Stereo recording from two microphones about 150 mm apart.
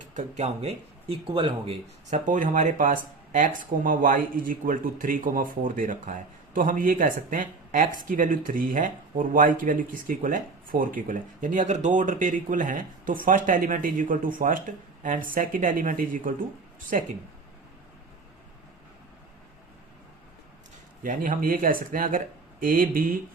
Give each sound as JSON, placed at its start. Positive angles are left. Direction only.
{"t": 0.1, "sound": "speech", "side_deg": -45}
{"t": 2.0, "sound": "speech", "side_deg": -55}
{"t": 21.0, "sound": "speech", "side_deg": -65}